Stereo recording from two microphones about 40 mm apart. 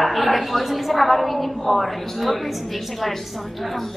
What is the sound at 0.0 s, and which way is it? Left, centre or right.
A woman's voice, centre.